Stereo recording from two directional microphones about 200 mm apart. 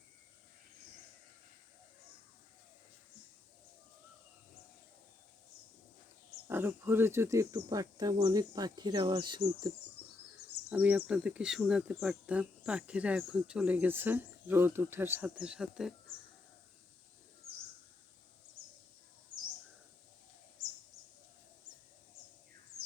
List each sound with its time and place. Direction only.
6.5 s speech: 10° right (ahead or behind)
10.7 s speech: 5° right (ahead or behind)